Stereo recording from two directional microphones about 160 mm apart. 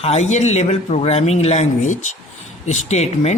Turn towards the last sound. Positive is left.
turn(degrees=40)  # may be behind; listen again after turning